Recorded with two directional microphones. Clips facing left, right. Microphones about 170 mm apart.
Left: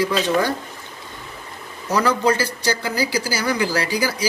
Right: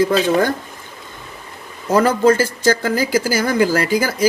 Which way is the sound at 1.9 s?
50° right (ahead or behind).